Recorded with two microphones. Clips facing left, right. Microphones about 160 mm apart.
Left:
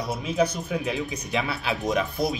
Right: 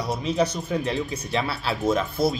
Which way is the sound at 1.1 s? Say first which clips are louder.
Right 1 dB; 15° left (ahead or behind).